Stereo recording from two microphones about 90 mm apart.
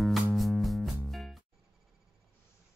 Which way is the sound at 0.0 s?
Centre (ahead or behind).